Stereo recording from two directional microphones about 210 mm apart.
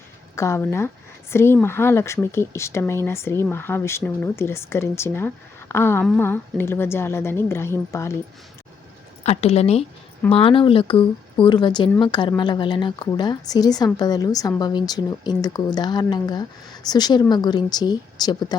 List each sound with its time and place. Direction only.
0.3 s speech: 15° left (ahead or behind)
9.2 s a woman's voice: 30° left (ahead or behind)